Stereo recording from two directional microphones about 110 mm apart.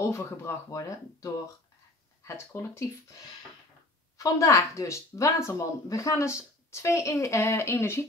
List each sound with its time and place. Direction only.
0.0 s speech: 25° left (ahead or behind)
4.2 s speech: 30° left (ahead or behind)